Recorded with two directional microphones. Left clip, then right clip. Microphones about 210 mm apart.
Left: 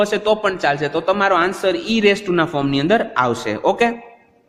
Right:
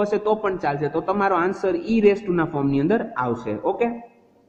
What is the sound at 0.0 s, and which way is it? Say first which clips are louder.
A man's voice: left 5 dB; 25° left (ahead or behind).